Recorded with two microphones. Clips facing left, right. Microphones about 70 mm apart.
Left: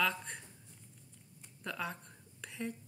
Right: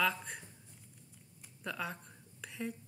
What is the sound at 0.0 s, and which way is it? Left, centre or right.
Speech, centre.